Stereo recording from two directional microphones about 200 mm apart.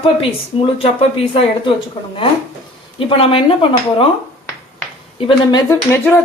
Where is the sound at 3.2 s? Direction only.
25° left (ahead or behind).